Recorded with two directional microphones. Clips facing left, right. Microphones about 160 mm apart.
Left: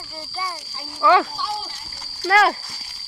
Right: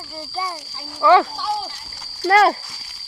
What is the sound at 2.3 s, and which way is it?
Speech, 35° right (ahead or behind).